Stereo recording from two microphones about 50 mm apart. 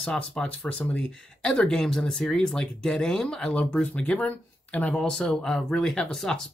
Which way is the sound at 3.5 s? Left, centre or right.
Left.